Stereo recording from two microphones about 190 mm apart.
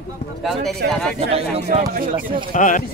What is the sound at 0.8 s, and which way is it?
Speech, 55° right (ahead or behind).